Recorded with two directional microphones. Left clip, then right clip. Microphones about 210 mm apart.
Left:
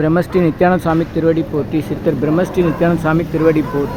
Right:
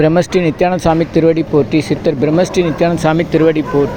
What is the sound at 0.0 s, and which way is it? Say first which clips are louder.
Speech: right 3 dB; 10° right (ahead or behind).